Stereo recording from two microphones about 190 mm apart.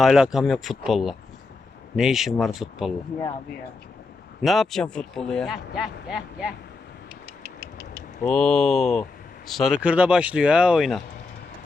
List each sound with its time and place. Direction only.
0.0 s a man's voice: centre (ahead or behind)
4.4 s a man's voice: centre (ahead or behind)
7.4 s a sound: 15° right (ahead or behind)
8.2 s a man's voice: 5° left (ahead or behind)